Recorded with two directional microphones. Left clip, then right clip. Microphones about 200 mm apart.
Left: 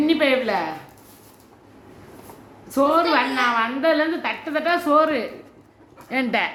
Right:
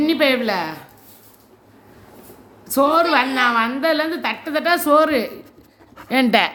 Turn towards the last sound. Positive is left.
turn(degrees=-55)  # may be behind; listen again after turning